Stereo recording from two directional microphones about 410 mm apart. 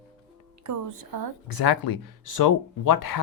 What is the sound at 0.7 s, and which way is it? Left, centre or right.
Speech, right.